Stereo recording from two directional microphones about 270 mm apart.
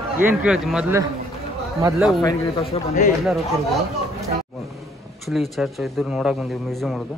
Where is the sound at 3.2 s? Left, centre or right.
Centre.